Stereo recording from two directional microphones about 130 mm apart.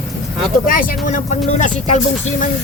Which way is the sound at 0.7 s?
80° left.